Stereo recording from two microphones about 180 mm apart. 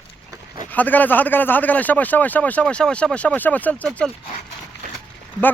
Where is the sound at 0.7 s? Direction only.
10° left (ahead or behind).